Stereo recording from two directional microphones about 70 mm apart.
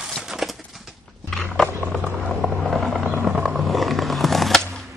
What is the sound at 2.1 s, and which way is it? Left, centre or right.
Vehicle, centre.